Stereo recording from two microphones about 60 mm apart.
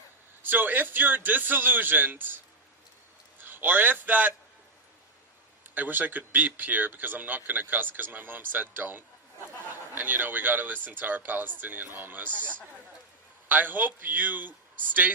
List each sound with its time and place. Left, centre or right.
0.4 s speech: right
3.4 s a man's voice: right
5.7 s speech: right
13.5 s speech: right